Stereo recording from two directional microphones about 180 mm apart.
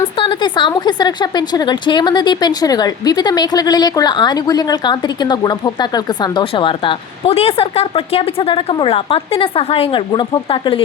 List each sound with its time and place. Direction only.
0.2 s a woman's voice: 25° left (ahead or behind)